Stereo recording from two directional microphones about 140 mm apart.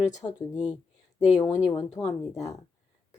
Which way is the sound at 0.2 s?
30° left (ahead or behind).